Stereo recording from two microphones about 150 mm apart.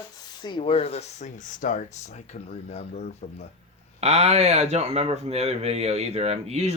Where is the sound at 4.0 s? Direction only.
45° right (ahead or behind).